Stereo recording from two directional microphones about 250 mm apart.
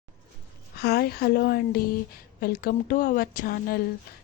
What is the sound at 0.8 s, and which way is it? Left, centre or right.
Speech, left.